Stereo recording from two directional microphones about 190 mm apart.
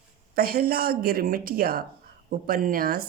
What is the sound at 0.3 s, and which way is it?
Speech, 50° right (ahead or behind).